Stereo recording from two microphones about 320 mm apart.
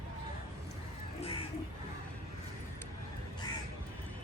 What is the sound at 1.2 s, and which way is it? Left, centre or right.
Crow, centre.